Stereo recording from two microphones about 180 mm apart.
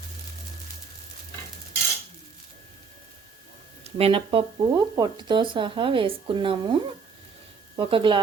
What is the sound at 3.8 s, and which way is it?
Speech, 30° right (ahead or behind).